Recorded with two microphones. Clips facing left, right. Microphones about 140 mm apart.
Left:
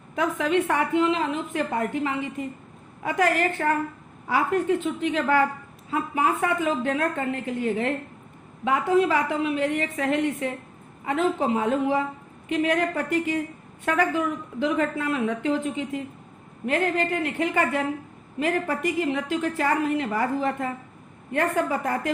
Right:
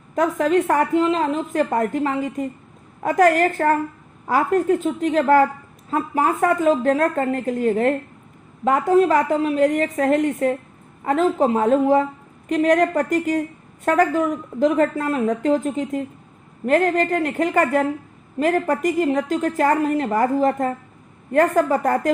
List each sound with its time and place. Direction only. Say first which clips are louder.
0.2 s a woman's voice: right 5 dB; 40° right (ahead or behind)